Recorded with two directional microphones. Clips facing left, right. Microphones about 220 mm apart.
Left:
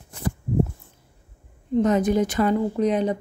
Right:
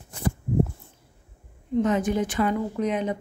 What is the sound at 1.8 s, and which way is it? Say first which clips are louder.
Speech: left 3 dB; 40° left (ahead or behind).